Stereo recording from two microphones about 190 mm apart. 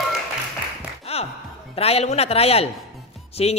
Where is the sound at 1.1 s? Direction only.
30° left (ahead or behind).